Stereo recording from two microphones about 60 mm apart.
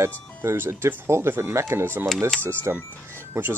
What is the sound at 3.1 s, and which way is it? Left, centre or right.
Music, right.